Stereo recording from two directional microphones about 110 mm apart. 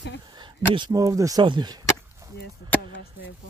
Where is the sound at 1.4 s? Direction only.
45° right (ahead or behind).